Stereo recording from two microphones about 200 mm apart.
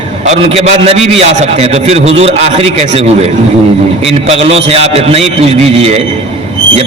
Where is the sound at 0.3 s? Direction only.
30° right (ahead or behind).